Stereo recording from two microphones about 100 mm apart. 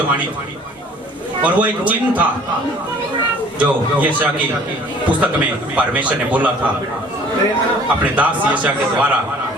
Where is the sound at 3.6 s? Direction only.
15° right (ahead or behind).